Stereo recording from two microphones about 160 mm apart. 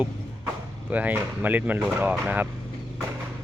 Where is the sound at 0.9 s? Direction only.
10° right (ahead or behind).